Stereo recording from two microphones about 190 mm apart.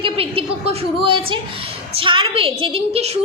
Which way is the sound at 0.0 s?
30° right (ahead or behind).